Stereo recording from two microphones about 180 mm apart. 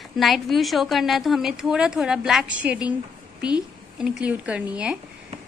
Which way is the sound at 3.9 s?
5° right (ahead or behind).